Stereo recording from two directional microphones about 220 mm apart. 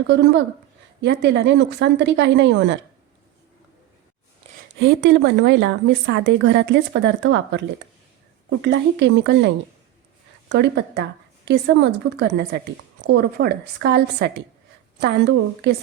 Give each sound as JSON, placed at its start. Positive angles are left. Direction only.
{"t": 0.1, "sound": "a woman's voice", "side_deg": -50}
{"t": 4.4, "sound": "a sound", "side_deg": -30}
{"t": 4.8, "sound": "a woman's voice", "side_deg": -55}
{"t": 10.5, "sound": "a woman's voice", "side_deg": -50}